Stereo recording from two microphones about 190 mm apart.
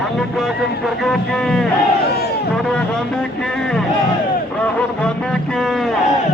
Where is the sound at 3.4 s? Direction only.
5° left (ahead or behind).